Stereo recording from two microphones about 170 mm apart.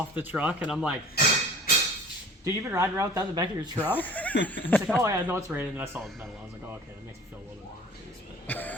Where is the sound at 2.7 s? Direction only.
15° right (ahead or behind).